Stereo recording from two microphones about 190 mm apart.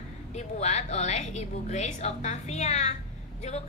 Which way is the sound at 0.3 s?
35° left (ahead or behind).